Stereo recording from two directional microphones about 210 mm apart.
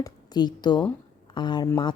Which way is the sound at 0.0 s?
20° left (ahead or behind).